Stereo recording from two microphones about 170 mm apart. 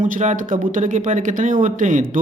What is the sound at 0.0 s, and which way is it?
Speech, 45° right (ahead or behind).